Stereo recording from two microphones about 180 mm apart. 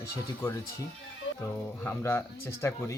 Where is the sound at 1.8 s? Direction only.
10° left (ahead or behind).